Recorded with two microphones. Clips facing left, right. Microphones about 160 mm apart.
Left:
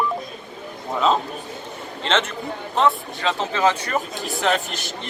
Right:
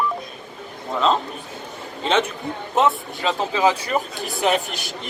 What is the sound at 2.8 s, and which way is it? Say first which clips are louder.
Speech: even; 15° right (ahead or behind).